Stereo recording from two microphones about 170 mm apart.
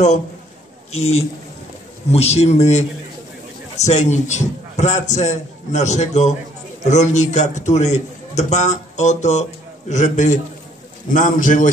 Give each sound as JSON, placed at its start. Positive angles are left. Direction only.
{"t": 0.9, "sound": "a man's voice", "side_deg": 40}